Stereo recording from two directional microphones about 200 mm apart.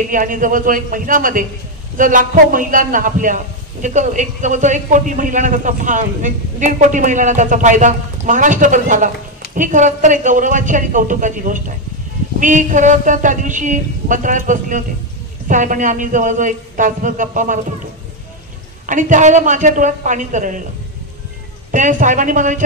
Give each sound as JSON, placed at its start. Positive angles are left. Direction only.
{"t": 0.1, "sound": "a man's voice", "side_deg": -40}
{"t": 18.9, "sound": "a man's voice", "side_deg": -40}
{"t": 21.7, "sound": "a man's voice", "side_deg": -40}